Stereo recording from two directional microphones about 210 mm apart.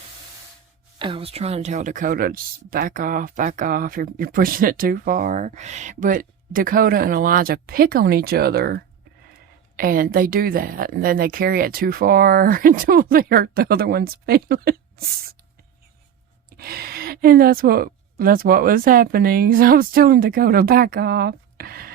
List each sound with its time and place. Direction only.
0.9 s speech: 25° right (ahead or behind); by 15.4 s 45° right (ahead or behind)
16.5 s speech: 45° right (ahead or behind)